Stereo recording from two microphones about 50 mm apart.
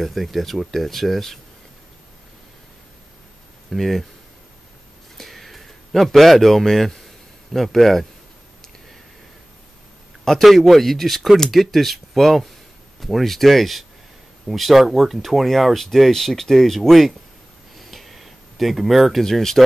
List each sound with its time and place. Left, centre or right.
0.0 s speech: centre
3.7 s speech: centre
5.1 s a sound: centre
7.5 s speech: centre
10.2 s speech: centre
17.7 s a sound: centre